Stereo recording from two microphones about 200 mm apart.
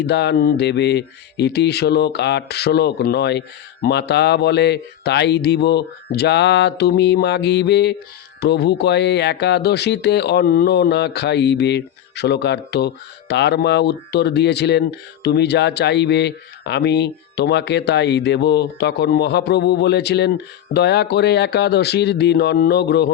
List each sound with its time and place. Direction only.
0.0 s speech: 55° left (ahead or behind)